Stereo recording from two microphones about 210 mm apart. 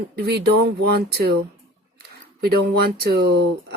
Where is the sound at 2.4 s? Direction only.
50° right (ahead or behind).